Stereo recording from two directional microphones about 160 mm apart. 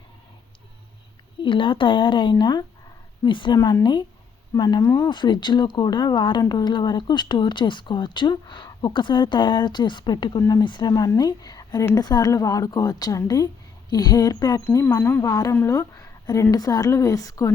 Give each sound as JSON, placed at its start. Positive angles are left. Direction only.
{"t": 1.4, "sound": "speech", "side_deg": 30}